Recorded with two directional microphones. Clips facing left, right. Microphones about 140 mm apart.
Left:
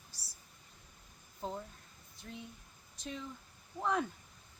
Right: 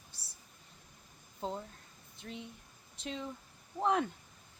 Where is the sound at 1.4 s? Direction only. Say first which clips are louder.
Right 2 dB; 20° right (ahead or behind).